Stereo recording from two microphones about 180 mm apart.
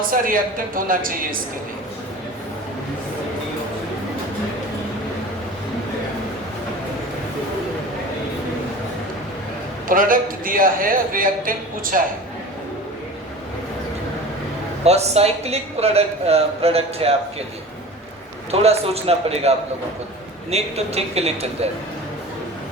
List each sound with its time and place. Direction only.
0.8 s a man's voice: 50° right (ahead or behind)
9.9 s a man's voice: 50° right (ahead or behind)
14.8 s a man's voice: 35° right (ahead or behind)
18.5 s a man's voice: 35° right (ahead or behind)